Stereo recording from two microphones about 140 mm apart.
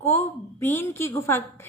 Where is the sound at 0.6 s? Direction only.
15° left (ahead or behind).